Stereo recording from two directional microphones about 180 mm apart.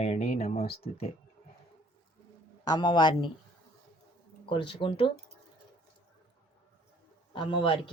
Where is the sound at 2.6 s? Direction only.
25° left (ahead or behind).